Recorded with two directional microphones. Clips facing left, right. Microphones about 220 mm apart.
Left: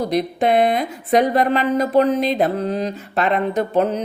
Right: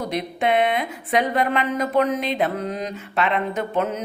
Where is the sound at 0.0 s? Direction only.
35° left (ahead or behind).